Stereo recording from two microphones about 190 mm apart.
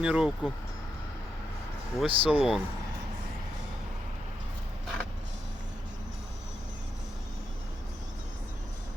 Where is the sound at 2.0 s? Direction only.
30° right (ahead or behind).